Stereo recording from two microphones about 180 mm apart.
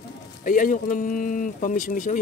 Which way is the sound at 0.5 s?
45° left (ahead or behind).